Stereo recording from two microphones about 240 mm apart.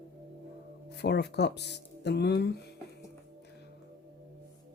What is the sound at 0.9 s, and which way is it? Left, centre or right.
Speech, left.